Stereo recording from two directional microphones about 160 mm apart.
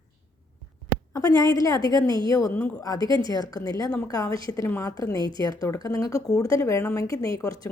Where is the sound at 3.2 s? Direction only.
25° left (ahead or behind).